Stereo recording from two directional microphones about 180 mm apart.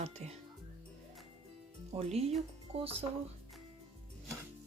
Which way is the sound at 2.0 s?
35° right (ahead or behind).